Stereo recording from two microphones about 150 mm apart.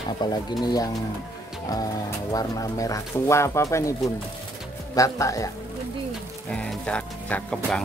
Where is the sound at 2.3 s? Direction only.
25° left (ahead or behind).